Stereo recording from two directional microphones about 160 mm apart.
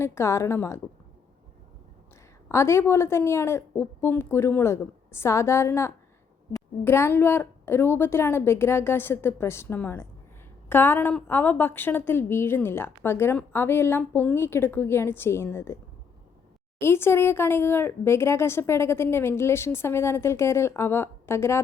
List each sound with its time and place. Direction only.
0.0 s a woman's voice: 15° left (ahead or behind)
2.5 s a woman's voice: 15° left (ahead or behind)
16.8 s a woman's voice: 15° left (ahead or behind)